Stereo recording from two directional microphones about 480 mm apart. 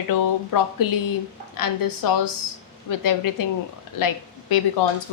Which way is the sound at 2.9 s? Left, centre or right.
Left.